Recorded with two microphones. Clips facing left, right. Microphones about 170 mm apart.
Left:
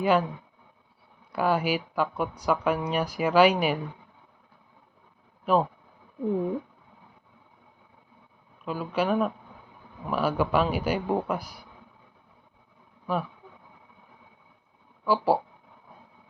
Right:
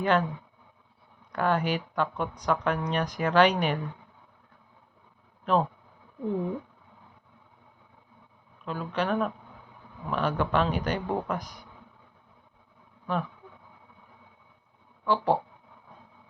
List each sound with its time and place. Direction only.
0.0 s speech: 5° left (ahead or behind)
1.3 s speech: 10° left (ahead or behind)
5.5 s speech: 10° left (ahead or behind)
8.6 s speech: 10° left (ahead or behind)
13.1 s speech: 5° left (ahead or behind)
15.0 s speech: 5° left (ahead or behind)